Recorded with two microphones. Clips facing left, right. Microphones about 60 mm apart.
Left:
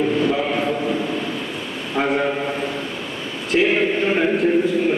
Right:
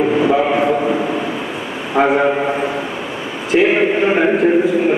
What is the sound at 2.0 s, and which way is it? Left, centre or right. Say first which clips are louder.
Speech: right 7 dB; right.